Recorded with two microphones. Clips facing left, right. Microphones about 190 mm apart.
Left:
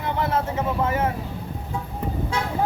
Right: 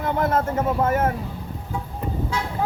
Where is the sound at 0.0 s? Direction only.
50° right (ahead or behind).